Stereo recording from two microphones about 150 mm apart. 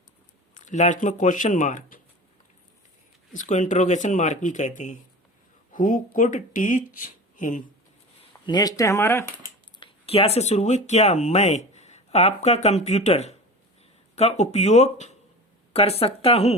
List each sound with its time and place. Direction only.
0.5 s speech: 55° left (ahead or behind)
3.3 s speech: 55° left (ahead or behind)
8.4 s speech: 25° left (ahead or behind)
9.8 s speech: 40° left (ahead or behind)